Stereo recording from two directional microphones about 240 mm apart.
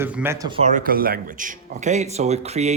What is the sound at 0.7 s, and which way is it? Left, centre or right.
Speech, right.